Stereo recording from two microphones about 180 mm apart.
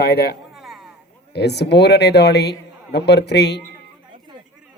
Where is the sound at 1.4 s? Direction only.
70° left (ahead or behind).